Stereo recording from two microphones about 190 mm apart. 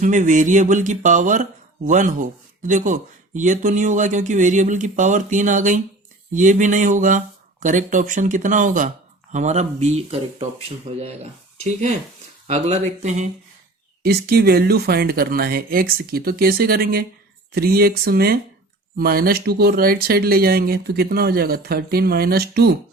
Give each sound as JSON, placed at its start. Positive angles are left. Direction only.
{"t": 0.0, "sound": "speech", "side_deg": -40}
{"t": 14.0, "sound": "speech", "side_deg": -55}